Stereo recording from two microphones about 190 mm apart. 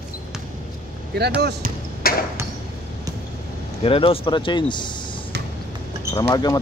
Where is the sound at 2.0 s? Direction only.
50° left (ahead or behind).